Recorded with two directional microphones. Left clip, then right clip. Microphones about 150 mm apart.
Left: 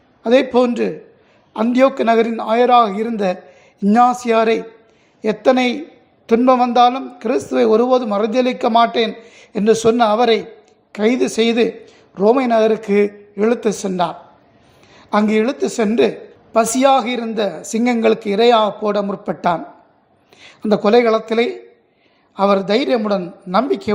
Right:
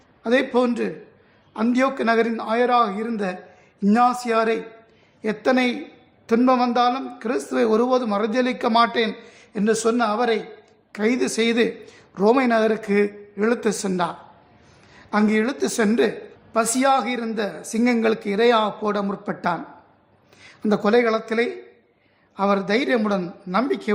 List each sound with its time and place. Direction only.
0.2 s a man's voice: 20° left (ahead or behind)